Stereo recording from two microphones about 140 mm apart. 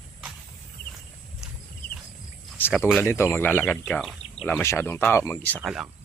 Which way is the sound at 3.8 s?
Centre (ahead or behind).